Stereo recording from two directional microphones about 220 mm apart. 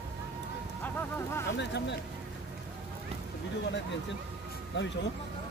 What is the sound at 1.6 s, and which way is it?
Speech, 50° left (ahead or behind).